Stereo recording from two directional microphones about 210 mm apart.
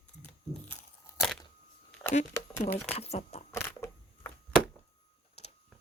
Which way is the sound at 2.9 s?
30° left (ahead or behind).